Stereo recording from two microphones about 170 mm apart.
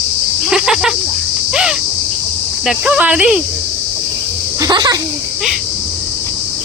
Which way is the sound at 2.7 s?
5° right (ahead or behind).